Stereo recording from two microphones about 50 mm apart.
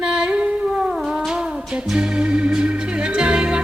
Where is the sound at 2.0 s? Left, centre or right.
Centre.